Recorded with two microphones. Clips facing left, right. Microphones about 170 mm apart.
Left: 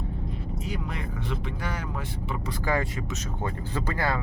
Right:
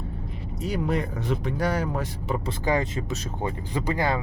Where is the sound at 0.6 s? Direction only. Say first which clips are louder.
Right 11 dB; 40° right (ahead or behind).